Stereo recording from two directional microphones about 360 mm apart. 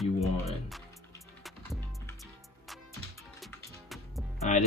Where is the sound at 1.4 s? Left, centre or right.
Centre.